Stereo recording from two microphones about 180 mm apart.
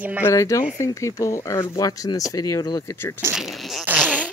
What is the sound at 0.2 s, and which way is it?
Speech, 15° left (ahead or behind).